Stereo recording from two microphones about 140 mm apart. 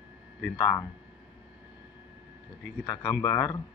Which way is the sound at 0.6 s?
25° left (ahead or behind).